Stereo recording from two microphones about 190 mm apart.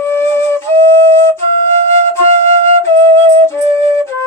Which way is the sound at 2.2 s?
35° right (ahead or behind).